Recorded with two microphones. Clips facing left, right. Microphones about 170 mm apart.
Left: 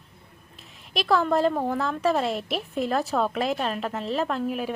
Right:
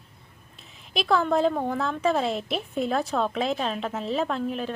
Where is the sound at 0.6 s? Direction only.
Centre (ahead or behind).